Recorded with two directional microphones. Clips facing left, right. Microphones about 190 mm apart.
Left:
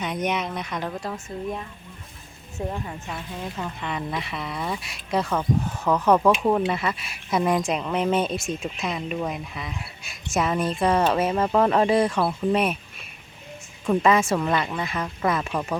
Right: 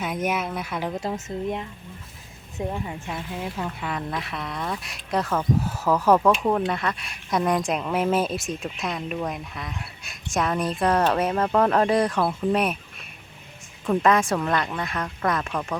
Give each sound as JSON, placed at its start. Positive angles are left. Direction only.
{"t": 0.0, "sound": "speech", "side_deg": -5}
{"t": 1.0, "sound": "speech", "side_deg": -20}
{"t": 2.6, "sound": "speech", "side_deg": -10}
{"t": 13.8, "sound": "speech", "side_deg": 0}